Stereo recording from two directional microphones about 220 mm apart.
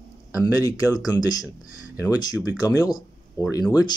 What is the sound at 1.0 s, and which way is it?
Speech, 15° left (ahead or behind).